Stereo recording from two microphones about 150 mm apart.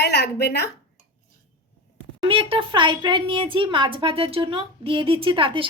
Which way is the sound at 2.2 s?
35° right (ahead or behind).